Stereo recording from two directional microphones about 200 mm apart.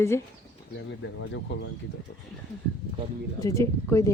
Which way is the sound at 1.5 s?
60° left (ahead or behind).